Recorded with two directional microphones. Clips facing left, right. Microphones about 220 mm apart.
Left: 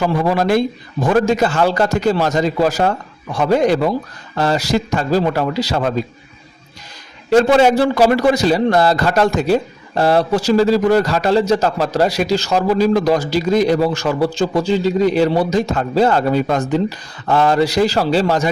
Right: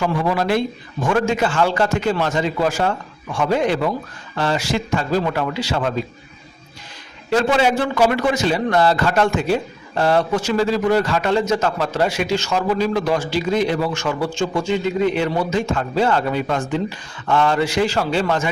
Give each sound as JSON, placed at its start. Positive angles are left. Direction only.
{"t": 0.0, "sound": "a man's voice", "side_deg": 40}
{"t": 7.3, "sound": "a man's voice", "side_deg": 40}